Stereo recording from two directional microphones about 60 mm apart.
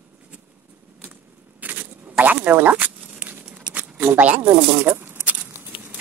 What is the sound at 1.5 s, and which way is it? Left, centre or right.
Rodents, right.